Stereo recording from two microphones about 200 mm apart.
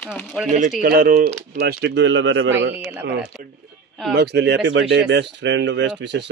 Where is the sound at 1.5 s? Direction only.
55° right (ahead or behind).